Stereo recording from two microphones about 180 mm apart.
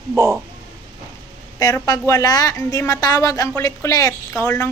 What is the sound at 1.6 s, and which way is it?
Speech, 20° left (ahead or behind).